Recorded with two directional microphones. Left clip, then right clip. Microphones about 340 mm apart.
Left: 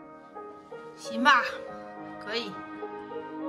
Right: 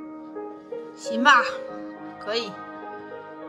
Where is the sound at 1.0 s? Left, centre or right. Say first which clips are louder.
Right 5 dB; centre.